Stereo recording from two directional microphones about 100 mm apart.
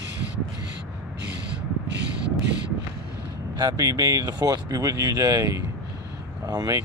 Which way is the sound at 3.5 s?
35° right (ahead or behind).